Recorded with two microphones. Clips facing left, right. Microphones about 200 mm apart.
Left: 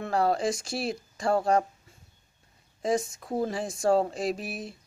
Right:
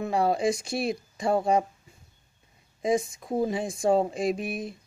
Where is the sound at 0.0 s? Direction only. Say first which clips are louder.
Right 1 dB; 5° right (ahead or behind).